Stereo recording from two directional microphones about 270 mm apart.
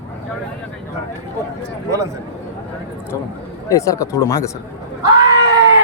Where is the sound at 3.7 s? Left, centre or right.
Centre.